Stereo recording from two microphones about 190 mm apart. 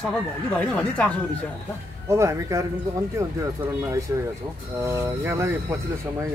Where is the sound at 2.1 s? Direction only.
15° right (ahead or behind).